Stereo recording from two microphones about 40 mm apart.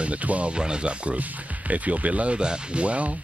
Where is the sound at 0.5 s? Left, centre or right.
Right.